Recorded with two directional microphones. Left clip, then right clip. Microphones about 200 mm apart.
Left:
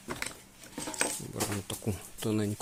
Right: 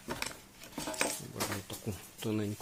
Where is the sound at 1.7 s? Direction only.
55° left (ahead or behind).